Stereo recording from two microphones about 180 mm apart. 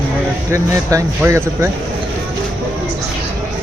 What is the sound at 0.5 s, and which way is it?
Speech, 15° right (ahead or behind).